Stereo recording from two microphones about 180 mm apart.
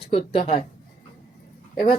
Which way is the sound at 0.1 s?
35° left (ahead or behind).